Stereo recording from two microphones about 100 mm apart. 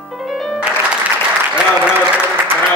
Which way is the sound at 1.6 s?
15° right (ahead or behind).